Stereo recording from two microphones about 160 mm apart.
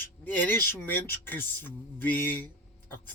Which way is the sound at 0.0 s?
10° left (ahead or behind).